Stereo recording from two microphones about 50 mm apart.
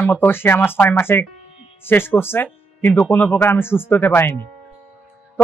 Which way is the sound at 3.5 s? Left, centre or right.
Left.